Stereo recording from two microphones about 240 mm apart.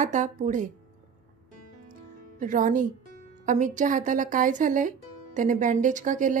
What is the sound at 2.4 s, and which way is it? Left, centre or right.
A woman's voice, right.